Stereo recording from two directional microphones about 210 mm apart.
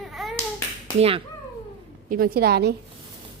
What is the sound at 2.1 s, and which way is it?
Speech, 45° right (ahead or behind).